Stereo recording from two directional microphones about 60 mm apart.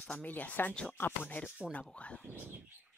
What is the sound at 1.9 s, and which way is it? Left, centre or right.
Speech, left.